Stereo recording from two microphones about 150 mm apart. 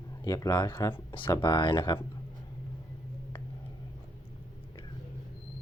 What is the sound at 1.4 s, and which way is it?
Speech, 30° left (ahead or behind).